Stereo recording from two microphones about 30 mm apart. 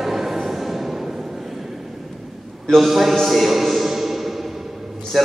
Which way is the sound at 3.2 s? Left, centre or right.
Centre.